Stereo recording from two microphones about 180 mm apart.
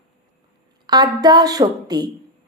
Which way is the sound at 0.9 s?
20° right (ahead or behind).